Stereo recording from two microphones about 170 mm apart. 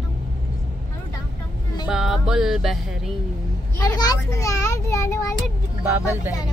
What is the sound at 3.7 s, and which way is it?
A child's voice, 20° left (ahead or behind).